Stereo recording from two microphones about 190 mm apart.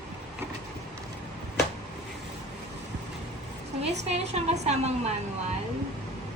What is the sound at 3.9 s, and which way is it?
A woman's voice, 35° right (ahead or behind).